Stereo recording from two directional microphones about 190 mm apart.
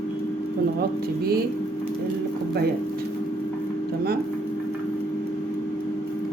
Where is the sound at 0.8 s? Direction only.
55° right (ahead or behind).